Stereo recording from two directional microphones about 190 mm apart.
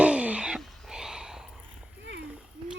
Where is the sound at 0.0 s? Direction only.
5° right (ahead or behind).